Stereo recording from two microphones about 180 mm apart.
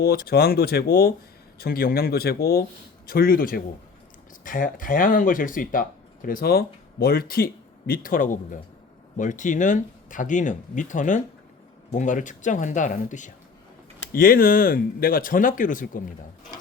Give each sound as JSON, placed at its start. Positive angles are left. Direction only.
{"t": 0.0, "sound": "speech", "side_deg": 55}
{"t": 14.1, "sound": "speech", "side_deg": 55}